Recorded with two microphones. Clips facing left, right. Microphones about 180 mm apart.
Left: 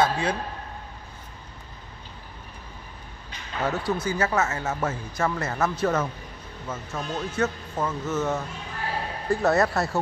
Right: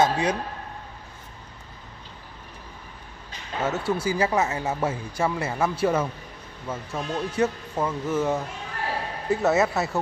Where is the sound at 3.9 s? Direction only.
10° right (ahead or behind).